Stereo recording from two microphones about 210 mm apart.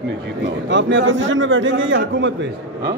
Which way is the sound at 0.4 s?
55° right (ahead or behind).